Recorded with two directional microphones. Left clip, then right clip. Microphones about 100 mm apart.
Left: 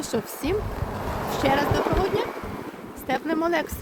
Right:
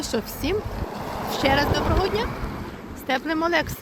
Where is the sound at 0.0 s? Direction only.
30° left (ahead or behind).